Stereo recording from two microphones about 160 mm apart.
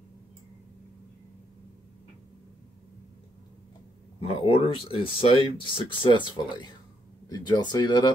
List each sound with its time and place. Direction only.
4.4 s speech: 35° left (ahead or behind)